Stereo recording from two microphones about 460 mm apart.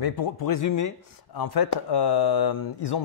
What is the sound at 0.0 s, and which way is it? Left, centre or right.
Speech, left.